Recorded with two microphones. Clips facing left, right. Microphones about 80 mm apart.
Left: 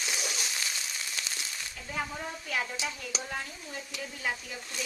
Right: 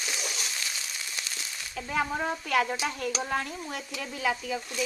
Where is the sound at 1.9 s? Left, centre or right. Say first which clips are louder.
Right 7 dB; right.